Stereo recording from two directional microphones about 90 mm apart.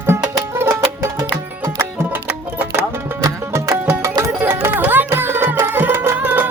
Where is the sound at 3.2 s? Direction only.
40° right (ahead or behind).